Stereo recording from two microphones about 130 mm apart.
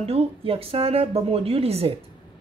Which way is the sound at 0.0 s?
50° right (ahead or behind).